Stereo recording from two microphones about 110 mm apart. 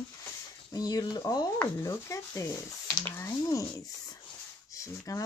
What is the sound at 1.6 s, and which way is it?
Rub, 25° left (ahead or behind).